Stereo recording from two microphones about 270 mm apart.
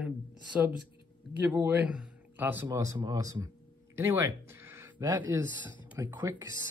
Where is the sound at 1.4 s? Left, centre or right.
Centre.